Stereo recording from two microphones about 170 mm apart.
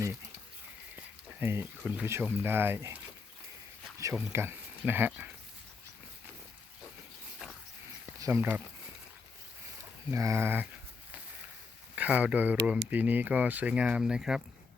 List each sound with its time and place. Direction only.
1.4 s speech: 15° right (ahead or behind)
3.9 s a sound: 15° right (ahead or behind)
4.3 s speech: 15° right (ahead or behind)
8.2 s speech: 15° right (ahead or behind)
10.1 s speech: 15° right (ahead or behind)
11.9 s speech: 10° right (ahead or behind)